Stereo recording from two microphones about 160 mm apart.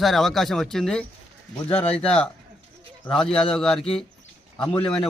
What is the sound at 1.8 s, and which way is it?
Speech, 40° left (ahead or behind).